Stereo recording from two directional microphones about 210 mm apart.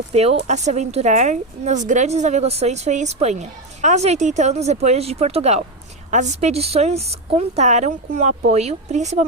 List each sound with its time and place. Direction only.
0.1 s a woman's voice: 30° right (ahead or behind)